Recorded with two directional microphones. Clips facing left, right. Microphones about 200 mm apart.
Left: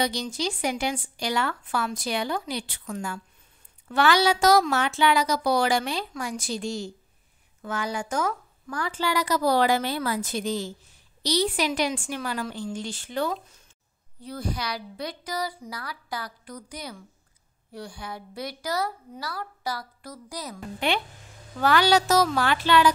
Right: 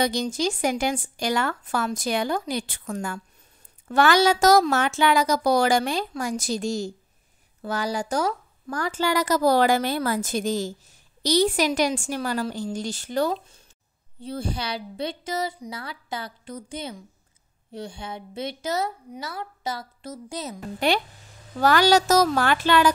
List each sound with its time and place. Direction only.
0.0 s a woman's voice: 50° right (ahead or behind); by 20.5 s 25° right (ahead or behind)
20.8 s a woman's voice: 40° right (ahead or behind)